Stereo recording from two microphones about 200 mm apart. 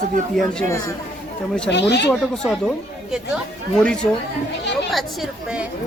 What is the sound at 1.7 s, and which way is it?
Speech, 60° left (ahead or behind).